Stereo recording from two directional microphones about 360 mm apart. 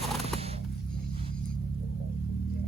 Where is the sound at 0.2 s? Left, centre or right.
Centre.